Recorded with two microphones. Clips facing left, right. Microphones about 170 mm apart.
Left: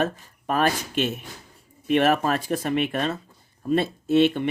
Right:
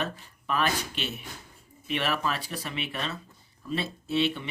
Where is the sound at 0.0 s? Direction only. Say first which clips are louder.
Left 8 dB; 45° left (ahead or behind).